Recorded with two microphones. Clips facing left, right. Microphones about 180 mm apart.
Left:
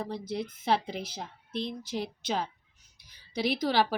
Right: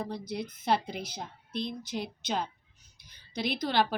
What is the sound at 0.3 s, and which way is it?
Speech, 25° left (ahead or behind).